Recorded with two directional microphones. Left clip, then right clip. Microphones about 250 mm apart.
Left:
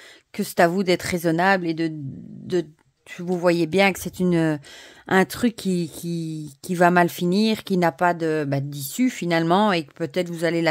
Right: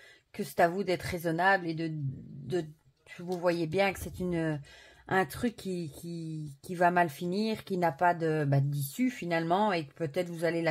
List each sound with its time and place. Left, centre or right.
0.4 s speech: left
3.1 s speech: left